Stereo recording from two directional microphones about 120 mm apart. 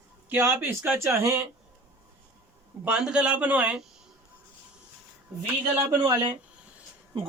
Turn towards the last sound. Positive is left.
turn(degrees=-40)  # may be behind; listen again after turning